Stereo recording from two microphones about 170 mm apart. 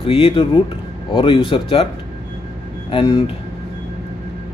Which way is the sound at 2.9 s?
30° left (ahead or behind).